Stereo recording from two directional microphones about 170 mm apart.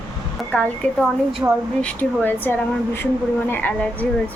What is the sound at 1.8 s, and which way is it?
Speech, 10° left (ahead or behind).